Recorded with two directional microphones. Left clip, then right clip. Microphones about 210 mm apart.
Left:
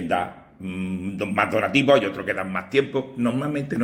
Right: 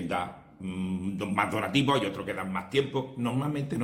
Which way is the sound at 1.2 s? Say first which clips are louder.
Left 7 dB; 10° right (ahead or behind).